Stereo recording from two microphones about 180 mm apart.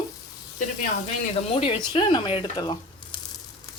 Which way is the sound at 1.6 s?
30° left (ahead or behind).